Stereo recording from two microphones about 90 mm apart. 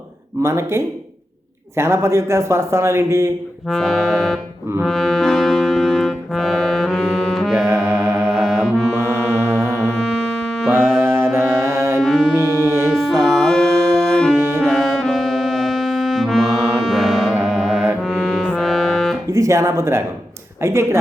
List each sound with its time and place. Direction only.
0.4 s a man's voice: 30° right (ahead or behind)
3.7 s music: centre (ahead or behind)
4.9 s brass instrument: centre (ahead or behind)
7.7 s music: 25° right (ahead or behind)
8.2 s music: 5° left (ahead or behind)
9.0 s mantra: 25° right (ahead or behind)
9.9 s music: 5° left (ahead or behind)
10.7 s music: 25° right (ahead or behind)
12.0 s music: 5° left (ahead or behind)
12.4 s music: 30° right (ahead or behind)
12.9 s music: 5° left (ahead or behind)
14.3 s music: 30° right (ahead or behind)
14.6 s music: 5° left (ahead or behind)
19.3 s a man's voice: 35° right (ahead or behind)